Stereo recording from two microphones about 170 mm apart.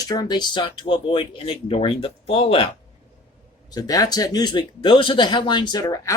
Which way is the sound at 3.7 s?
20° left (ahead or behind).